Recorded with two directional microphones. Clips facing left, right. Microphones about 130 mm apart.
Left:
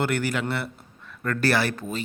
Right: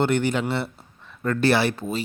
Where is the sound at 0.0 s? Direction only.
25° right (ahead or behind).